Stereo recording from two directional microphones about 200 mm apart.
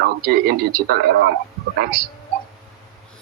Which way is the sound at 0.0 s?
50° right (ahead or behind).